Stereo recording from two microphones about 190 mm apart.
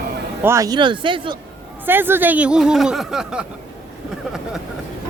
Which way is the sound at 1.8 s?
10° right (ahead or behind).